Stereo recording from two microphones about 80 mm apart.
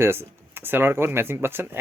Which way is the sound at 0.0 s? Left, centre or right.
Right.